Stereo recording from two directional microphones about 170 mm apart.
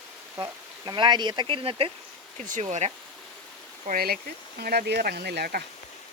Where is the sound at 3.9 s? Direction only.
60° right (ahead or behind).